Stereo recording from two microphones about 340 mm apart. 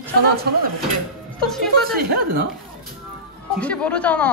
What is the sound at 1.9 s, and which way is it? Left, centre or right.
Speech, right.